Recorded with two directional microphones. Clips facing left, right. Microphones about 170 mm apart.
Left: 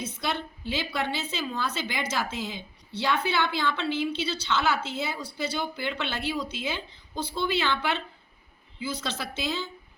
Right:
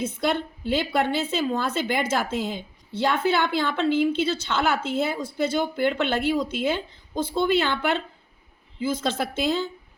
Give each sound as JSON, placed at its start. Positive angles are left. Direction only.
{"t": 0.0, "sound": "a woman's voice", "side_deg": -55}